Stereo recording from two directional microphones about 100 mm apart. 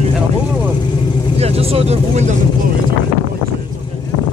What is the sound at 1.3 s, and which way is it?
Speech, 90° right.